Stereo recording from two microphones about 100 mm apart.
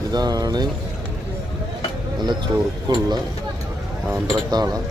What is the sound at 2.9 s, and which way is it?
Speech, 45° right (ahead or behind).